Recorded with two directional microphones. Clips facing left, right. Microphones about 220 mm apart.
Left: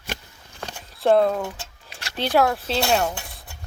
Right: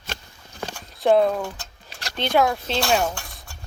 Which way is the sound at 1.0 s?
Centre (ahead or behind).